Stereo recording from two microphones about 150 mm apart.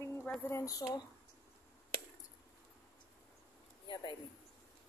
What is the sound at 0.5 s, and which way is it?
Speech, 20° left (ahead or behind).